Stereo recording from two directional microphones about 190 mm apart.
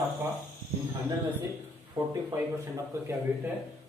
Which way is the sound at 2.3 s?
15° right (ahead or behind).